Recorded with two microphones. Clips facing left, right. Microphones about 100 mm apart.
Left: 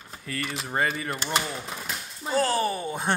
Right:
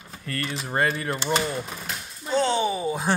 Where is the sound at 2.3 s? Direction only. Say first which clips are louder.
Right 2 dB; 5° left (ahead or behind).